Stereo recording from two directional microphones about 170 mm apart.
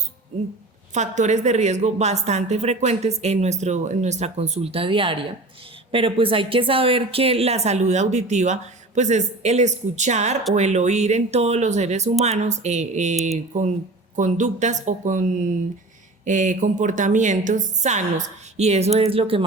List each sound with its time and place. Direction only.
0.9 s a woman's voice: 45° right (ahead or behind)
16.2 s a woman's voice: 45° right (ahead or behind)